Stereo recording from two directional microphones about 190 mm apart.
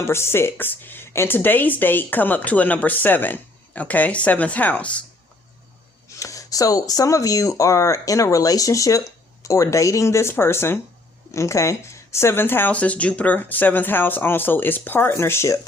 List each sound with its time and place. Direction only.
0.0 s speech: 15° left (ahead or behind)
6.1 s speech: 15° left (ahead or behind)